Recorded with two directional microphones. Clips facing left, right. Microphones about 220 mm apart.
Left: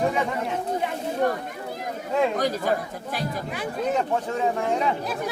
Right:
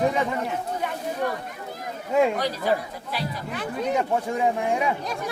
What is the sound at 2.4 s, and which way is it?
Speech, 45° left (ahead or behind).